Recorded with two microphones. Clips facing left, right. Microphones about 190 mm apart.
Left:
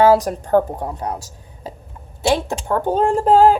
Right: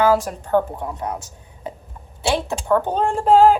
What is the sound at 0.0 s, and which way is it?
Speech, 35° left (ahead or behind).